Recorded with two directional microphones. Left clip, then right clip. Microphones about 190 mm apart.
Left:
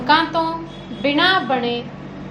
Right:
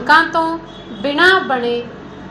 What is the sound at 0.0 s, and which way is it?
A woman's voice, 25° right (ahead or behind).